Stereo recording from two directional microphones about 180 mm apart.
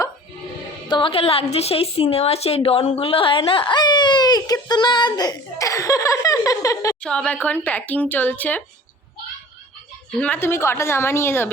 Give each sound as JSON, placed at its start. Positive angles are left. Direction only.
{"t": 0.9, "sound": "a woman's voice", "side_deg": 25}
{"t": 7.0, "sound": "speech", "side_deg": 5}
{"t": 10.2, "sound": "speech", "side_deg": 10}